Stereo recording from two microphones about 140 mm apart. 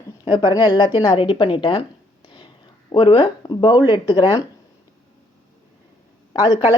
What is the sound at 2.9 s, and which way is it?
Speech, 40° left (ahead or behind).